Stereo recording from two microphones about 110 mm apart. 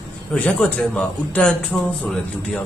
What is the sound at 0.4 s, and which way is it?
A man's voice, 10° left (ahead or behind).